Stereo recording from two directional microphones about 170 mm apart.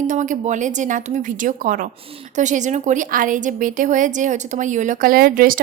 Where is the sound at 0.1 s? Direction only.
45° right (ahead or behind).